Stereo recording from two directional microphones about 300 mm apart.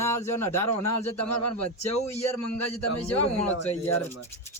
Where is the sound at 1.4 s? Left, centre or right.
Left.